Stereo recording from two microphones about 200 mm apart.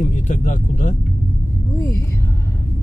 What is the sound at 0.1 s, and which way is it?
Speech, 40° left (ahead or behind).